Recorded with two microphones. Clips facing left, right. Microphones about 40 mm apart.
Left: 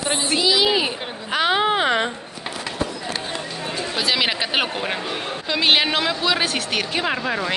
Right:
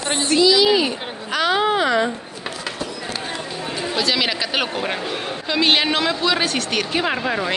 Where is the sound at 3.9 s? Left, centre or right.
Centre.